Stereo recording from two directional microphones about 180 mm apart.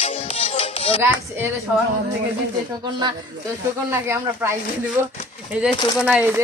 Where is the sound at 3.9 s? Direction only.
15° right (ahead or behind).